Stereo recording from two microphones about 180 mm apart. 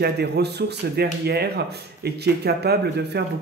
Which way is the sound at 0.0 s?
65° right (ahead or behind).